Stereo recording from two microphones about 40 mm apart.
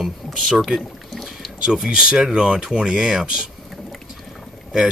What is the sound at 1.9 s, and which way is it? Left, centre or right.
Speech, right.